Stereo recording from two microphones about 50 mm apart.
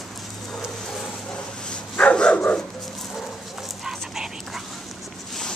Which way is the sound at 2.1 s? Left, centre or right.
Centre.